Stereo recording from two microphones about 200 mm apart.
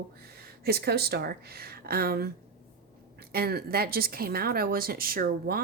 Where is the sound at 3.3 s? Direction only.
50° right (ahead or behind).